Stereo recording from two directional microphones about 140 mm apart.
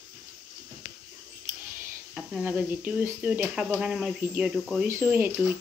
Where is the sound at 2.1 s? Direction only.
10° right (ahead or behind).